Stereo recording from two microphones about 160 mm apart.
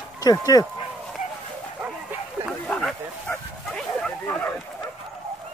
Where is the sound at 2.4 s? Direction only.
Centre (ahead or behind).